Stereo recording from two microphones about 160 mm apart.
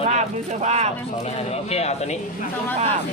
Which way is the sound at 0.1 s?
45° right (ahead or behind).